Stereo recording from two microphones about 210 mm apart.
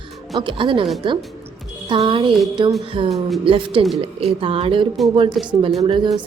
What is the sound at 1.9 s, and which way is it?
Speech, 25° right (ahead or behind).